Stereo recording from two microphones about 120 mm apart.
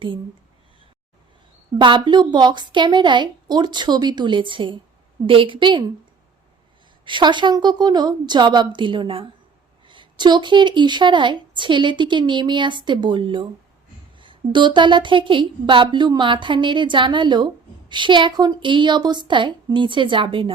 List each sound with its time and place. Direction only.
1.8 s a woman's voice: 40° right (ahead or behind)
7.0 s speech: 40° right (ahead or behind)